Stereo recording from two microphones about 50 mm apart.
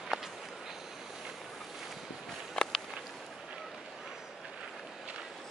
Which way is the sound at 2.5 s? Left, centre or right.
Centre.